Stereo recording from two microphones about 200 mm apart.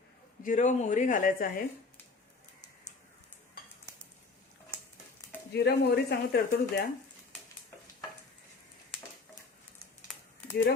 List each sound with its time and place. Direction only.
0.4 s speech: 40° left (ahead or behind)
5.5 s speech: 55° left (ahead or behind)
8.9 s a sound: 5° left (ahead or behind)